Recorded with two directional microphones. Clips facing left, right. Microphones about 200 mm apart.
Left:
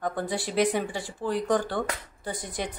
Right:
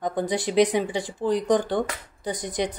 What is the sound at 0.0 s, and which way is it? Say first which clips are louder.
Speech: right 4 dB; 20° right (ahead or behind).